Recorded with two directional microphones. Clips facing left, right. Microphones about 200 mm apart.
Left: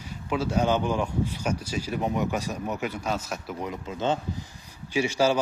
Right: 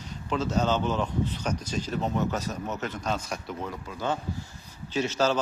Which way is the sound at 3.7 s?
20° left (ahead or behind).